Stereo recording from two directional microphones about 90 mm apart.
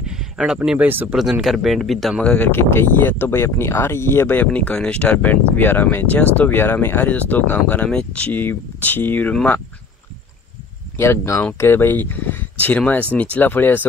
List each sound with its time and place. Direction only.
0.0 s a sound: 5° right (ahead or behind)
0.7 s speech: 20° right (ahead or behind)
1.1 s speech: 5° right (ahead or behind)
2.2 s speech: 20° left (ahead or behind)
4.5 s speech: 15° left (ahead or behind)
11.0 s speech: 30° left (ahead or behind)